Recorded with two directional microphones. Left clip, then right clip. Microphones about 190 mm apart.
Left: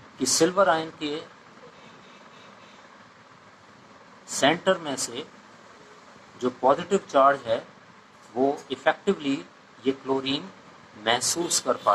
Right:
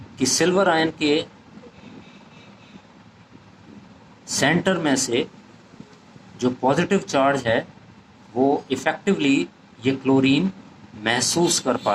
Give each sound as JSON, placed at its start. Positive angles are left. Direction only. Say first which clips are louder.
{"t": 0.2, "sound": "speech", "louder": "right 2 dB", "side_deg": -40}
{"t": 4.3, "sound": "speech", "louder": "right 2 dB", "side_deg": -40}
{"t": 6.4, "sound": "speech", "louder": "right 2 dB", "side_deg": -45}